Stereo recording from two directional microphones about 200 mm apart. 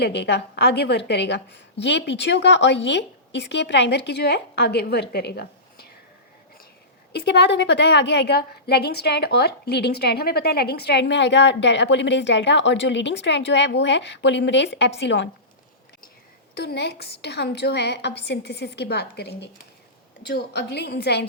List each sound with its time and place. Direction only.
0.0 s a woman's voice: 60° left (ahead or behind)
7.1 s a woman's voice: 55° left (ahead or behind)
16.6 s a woman's voice: 55° left (ahead or behind)